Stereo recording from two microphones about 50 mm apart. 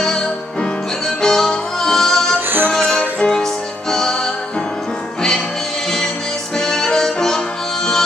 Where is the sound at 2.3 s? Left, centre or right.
Right.